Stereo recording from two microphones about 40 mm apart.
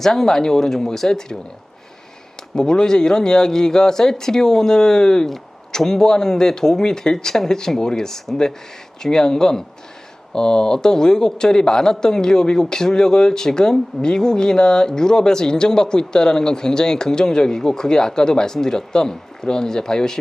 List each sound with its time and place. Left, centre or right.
0.0 s a man's voice: centre
2.6 s a man's voice: centre